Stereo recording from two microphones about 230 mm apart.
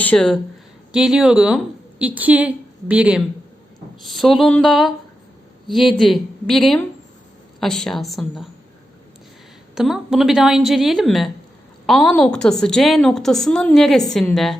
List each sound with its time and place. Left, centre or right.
0.0 s a woman's voice: centre
9.7 s a woman's voice: centre